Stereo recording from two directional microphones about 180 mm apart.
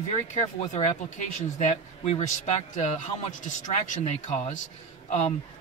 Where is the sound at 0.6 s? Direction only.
40° left (ahead or behind).